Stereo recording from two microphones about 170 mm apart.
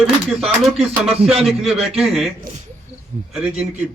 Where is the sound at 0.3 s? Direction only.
Centre (ahead or behind).